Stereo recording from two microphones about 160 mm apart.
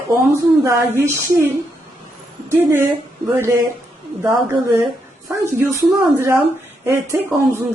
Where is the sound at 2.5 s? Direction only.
15° right (ahead or behind).